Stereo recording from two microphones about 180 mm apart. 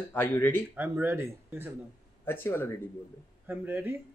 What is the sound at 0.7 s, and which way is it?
Speech, 10° right (ahead or behind).